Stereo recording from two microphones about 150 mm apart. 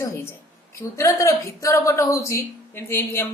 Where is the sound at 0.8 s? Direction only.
20° left (ahead or behind).